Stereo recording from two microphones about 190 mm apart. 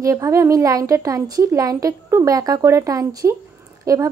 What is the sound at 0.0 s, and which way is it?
A woman's voice, 15° right (ahead or behind).